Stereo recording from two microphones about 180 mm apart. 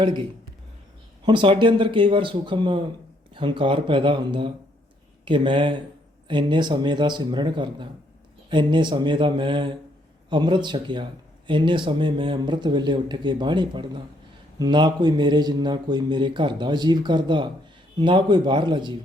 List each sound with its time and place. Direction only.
1.2 s speech: 25° right (ahead or behind)